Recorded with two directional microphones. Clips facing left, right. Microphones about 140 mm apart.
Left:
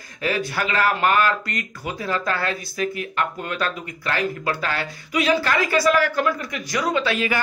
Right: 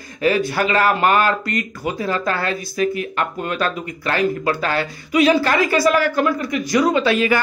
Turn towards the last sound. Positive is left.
turn(degrees=-30)  # may be behind; listen again after turning